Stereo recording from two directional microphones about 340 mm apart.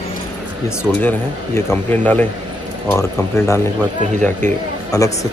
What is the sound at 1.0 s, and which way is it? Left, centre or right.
Speech, centre.